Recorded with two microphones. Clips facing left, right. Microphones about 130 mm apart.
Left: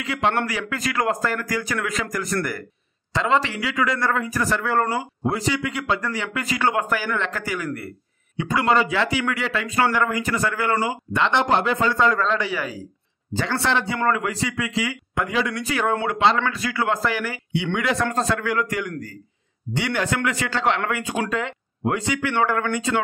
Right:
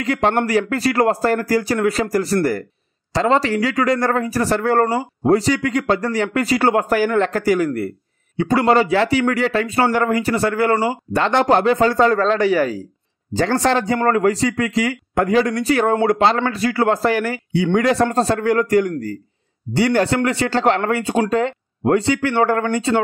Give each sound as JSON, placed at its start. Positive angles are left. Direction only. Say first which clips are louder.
{"t": 0.0, "sound": "a man's voice", "louder": "right 5 dB", "side_deg": -40}